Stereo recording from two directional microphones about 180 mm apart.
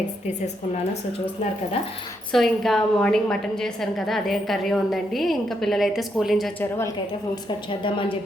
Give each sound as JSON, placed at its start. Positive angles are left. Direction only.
{"t": 2.3, "sound": "a woman's voice", "side_deg": 0}
{"t": 6.6, "sound": "a woman's voice", "side_deg": 15}
{"t": 7.7, "sound": "a woman's voice", "side_deg": 30}